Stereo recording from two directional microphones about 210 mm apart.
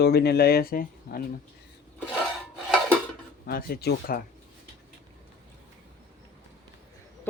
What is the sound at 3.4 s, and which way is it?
Speech, 45° left (ahead or behind).